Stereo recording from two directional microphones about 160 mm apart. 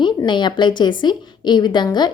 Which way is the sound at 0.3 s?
30° left (ahead or behind).